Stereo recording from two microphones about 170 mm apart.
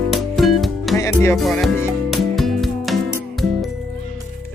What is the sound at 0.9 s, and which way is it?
Music, 15° left (ahead or behind).